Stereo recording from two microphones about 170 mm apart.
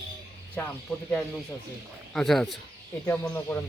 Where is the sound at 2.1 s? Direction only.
5° left (ahead or behind).